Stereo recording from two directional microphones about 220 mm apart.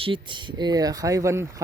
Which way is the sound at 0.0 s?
20° right (ahead or behind).